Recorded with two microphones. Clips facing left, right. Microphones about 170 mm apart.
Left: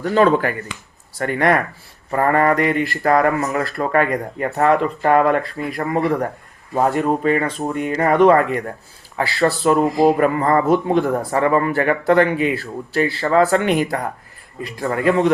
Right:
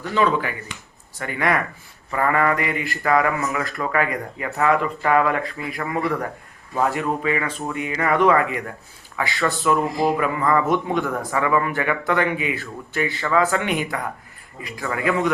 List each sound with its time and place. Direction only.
0.0 s mantra: 45° left (ahead or behind)
2.8 s speech: 40° left (ahead or behind)